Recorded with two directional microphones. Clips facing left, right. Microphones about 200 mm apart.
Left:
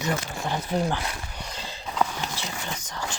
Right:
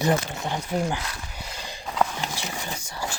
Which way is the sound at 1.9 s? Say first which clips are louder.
Right 1 dB; centre (ahead or behind).